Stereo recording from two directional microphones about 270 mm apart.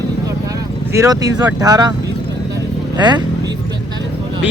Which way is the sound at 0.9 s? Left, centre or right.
Centre.